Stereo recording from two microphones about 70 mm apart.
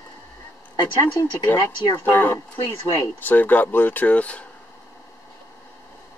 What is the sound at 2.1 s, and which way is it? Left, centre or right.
Speech, left.